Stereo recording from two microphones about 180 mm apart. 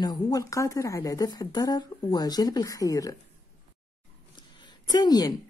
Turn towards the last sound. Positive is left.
turn(degrees=20)  # may be behind; listen again after turning